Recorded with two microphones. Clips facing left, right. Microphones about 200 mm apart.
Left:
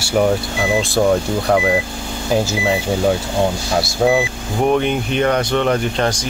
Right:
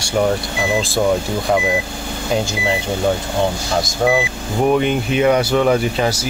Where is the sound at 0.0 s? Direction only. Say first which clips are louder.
Left 2 dB; 5° left (ahead or behind).